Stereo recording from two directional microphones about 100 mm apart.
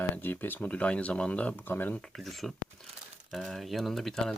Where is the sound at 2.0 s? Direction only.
Centre (ahead or behind).